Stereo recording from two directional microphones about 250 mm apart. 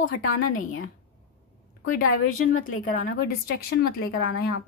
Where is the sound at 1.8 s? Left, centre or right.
Left.